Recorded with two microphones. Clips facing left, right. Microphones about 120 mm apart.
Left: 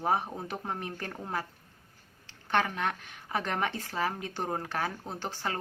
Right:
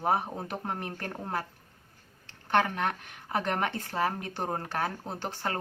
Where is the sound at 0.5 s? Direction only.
5° right (ahead or behind).